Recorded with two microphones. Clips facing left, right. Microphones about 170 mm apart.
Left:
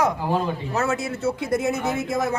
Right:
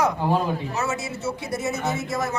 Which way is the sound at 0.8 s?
55° left (ahead or behind).